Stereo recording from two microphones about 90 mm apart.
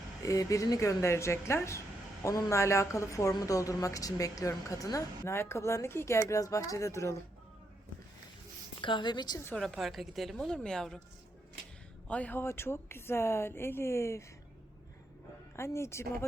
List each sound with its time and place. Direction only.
0.3 s speech: 35° left (ahead or behind)
5.2 s speech: 30° left (ahead or behind)
8.8 s a woman's voice: 60° left (ahead or behind)
9.6 s a woman's voice: 5° left (ahead or behind)
12.0 s speech: 15° left (ahead or behind); by 14.3 s 30° left (ahead or behind)
15.5 s speech: 30° left (ahead or behind)